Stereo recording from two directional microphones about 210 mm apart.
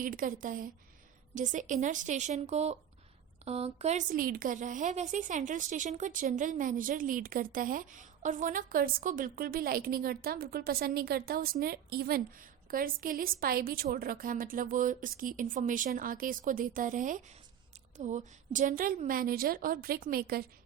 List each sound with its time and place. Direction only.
0.0 s a woman's voice: 40° right (ahead or behind)